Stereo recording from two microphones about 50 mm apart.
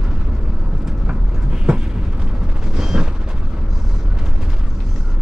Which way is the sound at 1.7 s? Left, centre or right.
Centre.